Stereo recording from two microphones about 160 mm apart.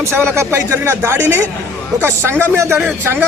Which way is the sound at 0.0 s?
15° right (ahead or behind).